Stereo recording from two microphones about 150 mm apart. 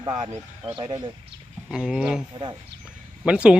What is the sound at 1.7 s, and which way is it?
Speech, 5° right (ahead or behind).